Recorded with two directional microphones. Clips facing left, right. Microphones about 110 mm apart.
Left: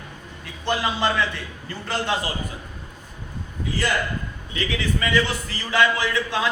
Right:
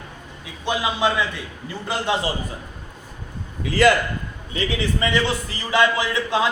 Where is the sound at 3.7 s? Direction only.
90° right.